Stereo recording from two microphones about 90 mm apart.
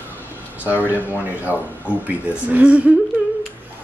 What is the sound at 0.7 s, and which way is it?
Speech, 20° left (ahead or behind).